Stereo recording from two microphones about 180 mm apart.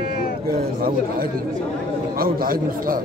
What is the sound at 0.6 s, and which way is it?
A man's voice, 55° right (ahead or behind).